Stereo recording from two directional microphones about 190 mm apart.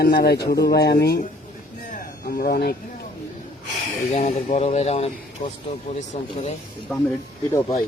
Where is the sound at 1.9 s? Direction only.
50° left (ahead or behind).